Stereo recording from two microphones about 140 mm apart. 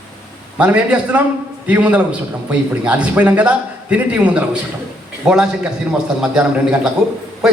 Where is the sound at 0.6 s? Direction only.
10° right (ahead or behind).